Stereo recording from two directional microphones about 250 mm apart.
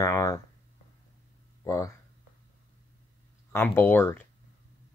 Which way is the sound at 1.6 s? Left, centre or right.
Centre.